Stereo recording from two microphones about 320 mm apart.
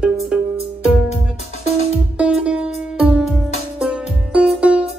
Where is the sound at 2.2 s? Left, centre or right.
Centre.